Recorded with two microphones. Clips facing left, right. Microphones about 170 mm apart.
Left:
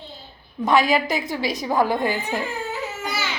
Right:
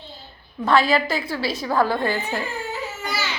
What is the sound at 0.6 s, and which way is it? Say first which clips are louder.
A woman's voice: even; 15° left (ahead or behind).